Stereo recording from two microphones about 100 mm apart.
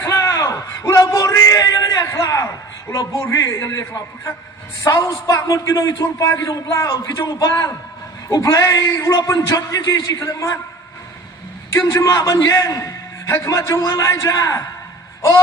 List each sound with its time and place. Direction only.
0.0 s bellow: 35° left (ahead or behind)
2.9 s a man's voice: 35° left (ahead or behind)
11.9 s a man's voice: 35° left (ahead or behind)